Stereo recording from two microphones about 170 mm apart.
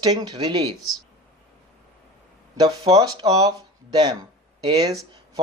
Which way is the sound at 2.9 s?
25° right (ahead or behind).